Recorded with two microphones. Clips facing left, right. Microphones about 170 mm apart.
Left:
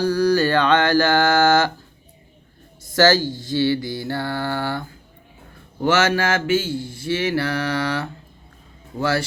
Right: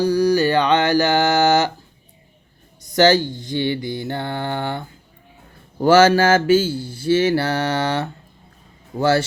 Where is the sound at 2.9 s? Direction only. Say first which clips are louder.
Right 2 dB; 20° right (ahead or behind).